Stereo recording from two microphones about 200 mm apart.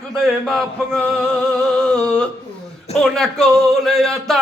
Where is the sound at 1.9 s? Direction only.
5° left (ahead or behind).